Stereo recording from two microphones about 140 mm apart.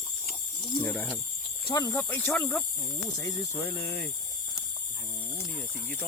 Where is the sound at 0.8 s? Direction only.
15° left (ahead or behind).